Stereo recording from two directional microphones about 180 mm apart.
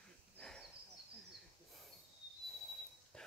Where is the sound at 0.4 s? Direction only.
5° left (ahead or behind).